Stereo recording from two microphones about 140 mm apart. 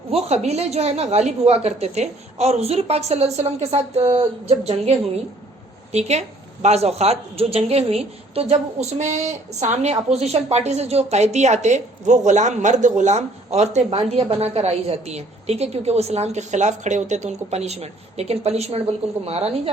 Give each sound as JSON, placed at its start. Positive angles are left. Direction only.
{"t": 0.1, "sound": "a woman's voice", "side_deg": -45}